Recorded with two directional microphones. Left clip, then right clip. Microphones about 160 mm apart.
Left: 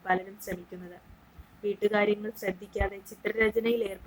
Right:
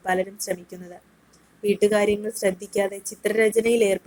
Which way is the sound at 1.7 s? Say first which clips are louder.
Right 6 dB; 15° right (ahead or behind).